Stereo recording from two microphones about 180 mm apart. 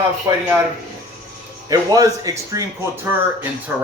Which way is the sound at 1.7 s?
20° right (ahead or behind).